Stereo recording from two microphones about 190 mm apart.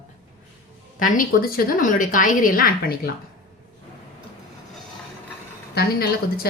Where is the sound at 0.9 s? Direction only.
45° left (ahead or behind).